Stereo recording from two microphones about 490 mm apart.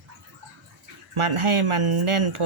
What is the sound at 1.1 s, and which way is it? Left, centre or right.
Speech, right.